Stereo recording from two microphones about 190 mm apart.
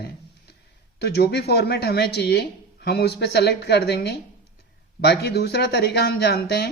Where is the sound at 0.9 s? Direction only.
60° left (ahead or behind).